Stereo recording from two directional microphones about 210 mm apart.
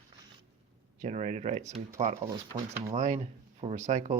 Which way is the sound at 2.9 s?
35° right (ahead or behind).